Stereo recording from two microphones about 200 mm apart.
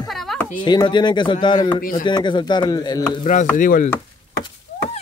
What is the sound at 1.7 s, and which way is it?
Speech, 45° left (ahead or behind).